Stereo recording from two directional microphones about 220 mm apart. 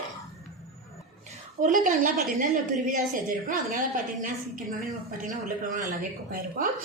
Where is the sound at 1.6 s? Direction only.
35° right (ahead or behind).